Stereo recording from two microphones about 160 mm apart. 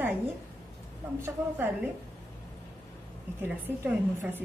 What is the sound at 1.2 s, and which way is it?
Speech, 15° right (ahead or behind).